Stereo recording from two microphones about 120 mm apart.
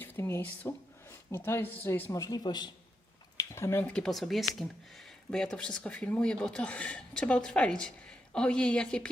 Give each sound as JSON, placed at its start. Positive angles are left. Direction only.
{"t": 0.0, "sound": "speech", "side_deg": 20}
{"t": 3.3, "sound": "a sound", "side_deg": 20}
{"t": 3.8, "sound": "speech", "side_deg": 5}